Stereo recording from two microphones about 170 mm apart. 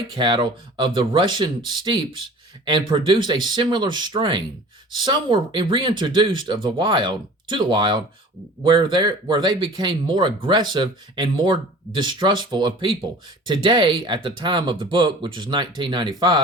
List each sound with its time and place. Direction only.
0.2 s speech: 30° right (ahead or behind)